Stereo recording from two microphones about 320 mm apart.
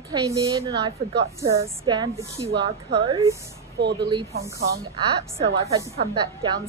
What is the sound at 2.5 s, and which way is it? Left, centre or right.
Speech, right.